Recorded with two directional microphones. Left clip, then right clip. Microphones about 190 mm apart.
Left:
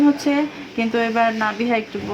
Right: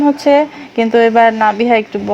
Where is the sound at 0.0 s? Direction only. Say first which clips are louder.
Right 8 dB; 40° right (ahead or behind).